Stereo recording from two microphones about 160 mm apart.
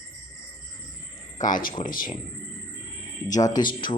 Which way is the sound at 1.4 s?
55° left (ahead or behind).